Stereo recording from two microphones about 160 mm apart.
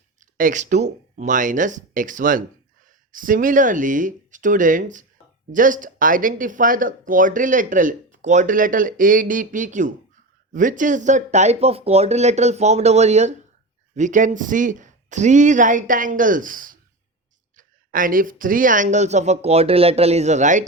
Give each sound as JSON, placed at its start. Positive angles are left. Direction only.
{"t": 0.2, "sound": "speech", "side_deg": -55}